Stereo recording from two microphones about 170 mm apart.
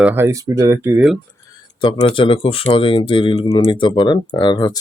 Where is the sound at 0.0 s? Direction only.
10° right (ahead or behind).